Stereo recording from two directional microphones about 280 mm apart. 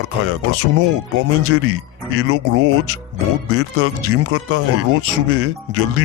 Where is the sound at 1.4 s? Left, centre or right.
Right.